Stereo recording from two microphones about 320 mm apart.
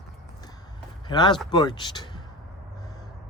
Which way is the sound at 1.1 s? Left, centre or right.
Centre.